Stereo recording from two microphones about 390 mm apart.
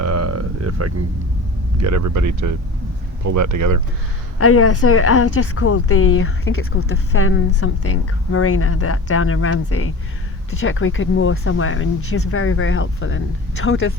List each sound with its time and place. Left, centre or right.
0.0 s a sound: right
1.8 s speech: right
4.4 s a woman's voice: left